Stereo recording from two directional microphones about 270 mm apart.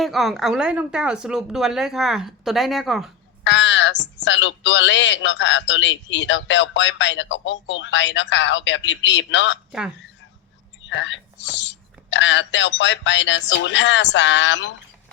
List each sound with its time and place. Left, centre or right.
0.0 s speech: centre
3.4 s a man's voice: left
10.8 s a man's voice: left